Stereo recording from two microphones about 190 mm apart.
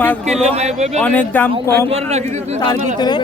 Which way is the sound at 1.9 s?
35° right (ahead or behind).